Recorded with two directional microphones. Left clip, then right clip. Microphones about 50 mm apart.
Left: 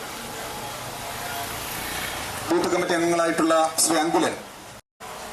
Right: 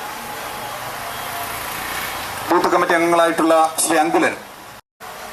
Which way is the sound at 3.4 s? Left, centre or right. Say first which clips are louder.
Right 5 dB; right.